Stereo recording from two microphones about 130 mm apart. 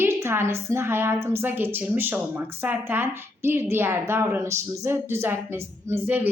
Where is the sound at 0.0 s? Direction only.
20° right (ahead or behind).